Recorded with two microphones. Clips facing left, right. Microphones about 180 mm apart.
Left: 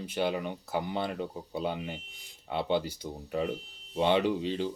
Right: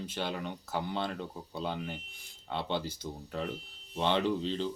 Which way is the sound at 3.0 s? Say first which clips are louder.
Left 5 dB; 20° left (ahead or behind).